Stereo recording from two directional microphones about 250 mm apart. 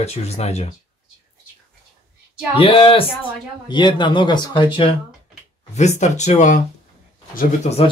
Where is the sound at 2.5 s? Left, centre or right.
Left.